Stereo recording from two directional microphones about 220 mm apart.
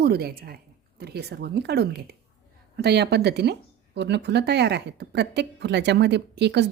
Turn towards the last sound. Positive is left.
turn(degrees=-50)  # may be behind; listen again after turning